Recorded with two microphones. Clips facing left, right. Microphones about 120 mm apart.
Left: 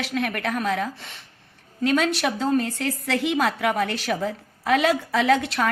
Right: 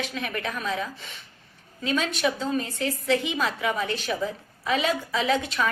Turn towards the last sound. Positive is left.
turn(degrees=70)  # may be behind; listen again after turning